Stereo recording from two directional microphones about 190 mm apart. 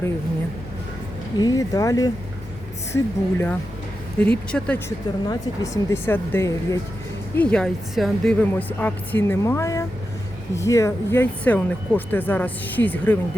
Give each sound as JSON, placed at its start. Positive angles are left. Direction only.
{"t": 1.4, "sound": "speech", "side_deg": 20}
{"t": 5.3, "sound": "speech", "side_deg": 15}